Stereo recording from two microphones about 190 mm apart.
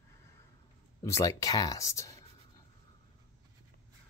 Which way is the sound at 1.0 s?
15° left (ahead or behind).